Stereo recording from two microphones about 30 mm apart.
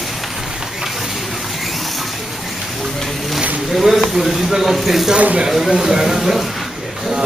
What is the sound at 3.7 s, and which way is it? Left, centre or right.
Speech, centre.